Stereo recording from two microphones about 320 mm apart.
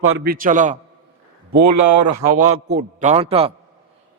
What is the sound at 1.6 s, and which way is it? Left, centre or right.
Speech, right.